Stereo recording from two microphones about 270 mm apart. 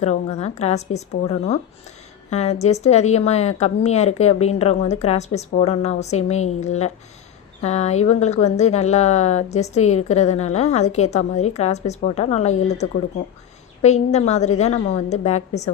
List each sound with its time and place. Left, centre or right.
0.0 s a woman's voice: left